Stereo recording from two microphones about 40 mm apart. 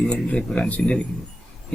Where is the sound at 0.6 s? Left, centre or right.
Left.